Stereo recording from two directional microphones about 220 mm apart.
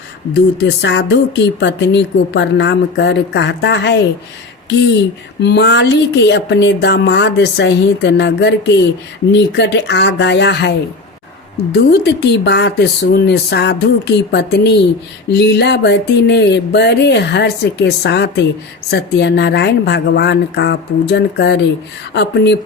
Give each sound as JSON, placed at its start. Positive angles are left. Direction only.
{"t": 0.6, "sound": "speech", "side_deg": 55}
{"t": 5.4, "sound": "speech", "side_deg": 50}
{"t": 11.9, "sound": "speech", "side_deg": 50}